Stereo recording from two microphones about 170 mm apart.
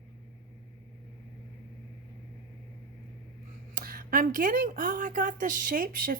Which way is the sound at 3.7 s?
55° right (ahead or behind).